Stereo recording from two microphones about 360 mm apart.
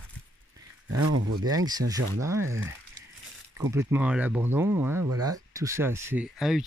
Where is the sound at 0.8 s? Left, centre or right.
Right.